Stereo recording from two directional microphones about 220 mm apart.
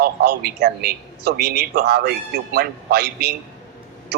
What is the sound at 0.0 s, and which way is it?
A man's voice, 45° right (ahead or behind).